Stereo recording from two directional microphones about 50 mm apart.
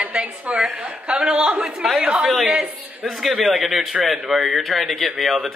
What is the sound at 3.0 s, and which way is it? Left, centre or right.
A man's voice, centre.